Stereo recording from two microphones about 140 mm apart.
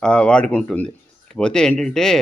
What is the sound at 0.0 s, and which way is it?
Speech, 5° left (ahead or behind).